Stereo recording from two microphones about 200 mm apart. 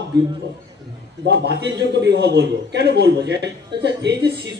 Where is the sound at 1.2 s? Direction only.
60° right (ahead or behind).